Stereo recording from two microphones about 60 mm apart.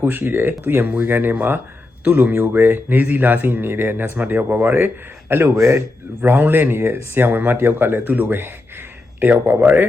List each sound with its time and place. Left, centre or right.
0.0 s speech: right
5.5 s a man's voice: right
6.2 s speech: right